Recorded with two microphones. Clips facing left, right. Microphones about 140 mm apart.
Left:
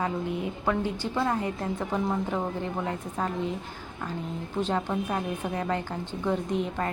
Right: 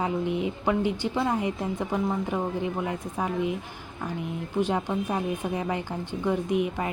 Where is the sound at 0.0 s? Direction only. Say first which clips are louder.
Right 3 dB; 20° right (ahead or behind).